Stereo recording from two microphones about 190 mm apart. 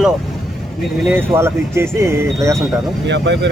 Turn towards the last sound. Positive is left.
turn(degrees=-65)  # may be behind; listen again after turning